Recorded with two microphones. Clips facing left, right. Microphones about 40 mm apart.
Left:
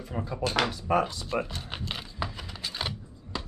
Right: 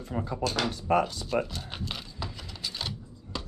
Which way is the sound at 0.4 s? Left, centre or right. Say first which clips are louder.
Left 3 dB; left.